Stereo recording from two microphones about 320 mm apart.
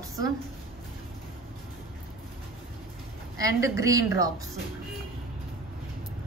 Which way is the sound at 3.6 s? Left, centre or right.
Centre.